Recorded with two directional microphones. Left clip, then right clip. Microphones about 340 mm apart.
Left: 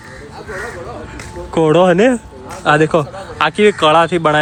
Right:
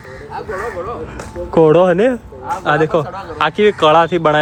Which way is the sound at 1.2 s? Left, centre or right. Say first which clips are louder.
Right 4 dB; centre.